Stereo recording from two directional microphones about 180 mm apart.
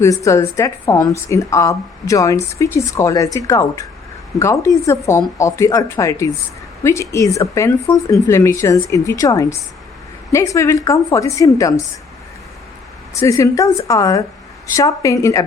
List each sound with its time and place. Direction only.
0.0 s speech: 15° left (ahead or behind)
13.1 s speech: 15° left (ahead or behind)